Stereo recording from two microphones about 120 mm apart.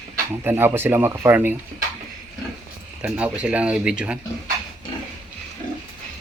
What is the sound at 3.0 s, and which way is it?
Speech, 10° right (ahead or behind).